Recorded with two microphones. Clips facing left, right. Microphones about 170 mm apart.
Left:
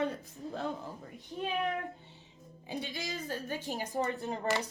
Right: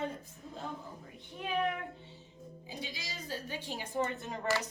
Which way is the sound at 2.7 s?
55° left (ahead or behind).